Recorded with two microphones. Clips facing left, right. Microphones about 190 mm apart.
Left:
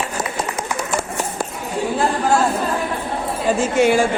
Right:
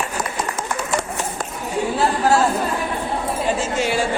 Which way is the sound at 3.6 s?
50° left (ahead or behind).